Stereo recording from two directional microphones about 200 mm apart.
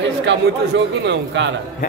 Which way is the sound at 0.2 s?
65° right (ahead or behind).